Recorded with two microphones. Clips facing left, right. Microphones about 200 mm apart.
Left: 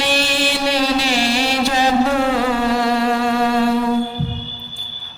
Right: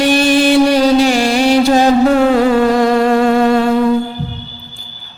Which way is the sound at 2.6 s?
45° right (ahead or behind).